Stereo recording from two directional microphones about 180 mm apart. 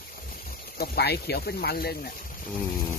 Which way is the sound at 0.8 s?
65° left (ahead or behind).